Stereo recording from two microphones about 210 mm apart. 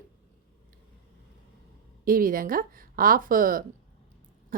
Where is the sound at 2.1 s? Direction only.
40° right (ahead or behind).